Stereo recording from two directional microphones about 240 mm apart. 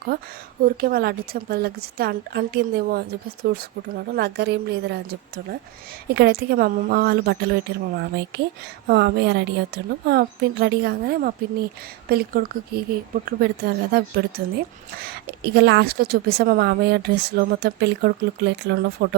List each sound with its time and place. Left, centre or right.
0.6 s a woman's voice: right
6.1 s a woman's voice: right